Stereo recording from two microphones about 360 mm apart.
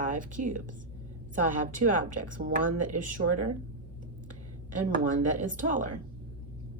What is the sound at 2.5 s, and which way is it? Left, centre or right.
Speech, right.